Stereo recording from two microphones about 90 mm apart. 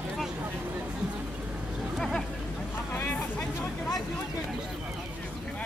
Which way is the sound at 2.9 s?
20° left (ahead or behind).